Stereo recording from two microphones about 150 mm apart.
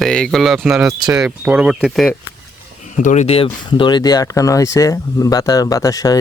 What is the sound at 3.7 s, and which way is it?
Speech, 30° left (ahead or behind).